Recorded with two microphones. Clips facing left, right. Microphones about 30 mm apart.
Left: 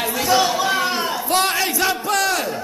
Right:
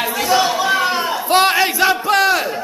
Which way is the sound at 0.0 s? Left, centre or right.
Centre.